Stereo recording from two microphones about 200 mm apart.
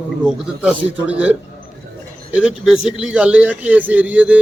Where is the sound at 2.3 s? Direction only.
5° right (ahead or behind).